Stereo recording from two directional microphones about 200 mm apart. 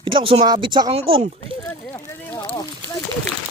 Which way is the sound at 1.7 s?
15° left (ahead or behind).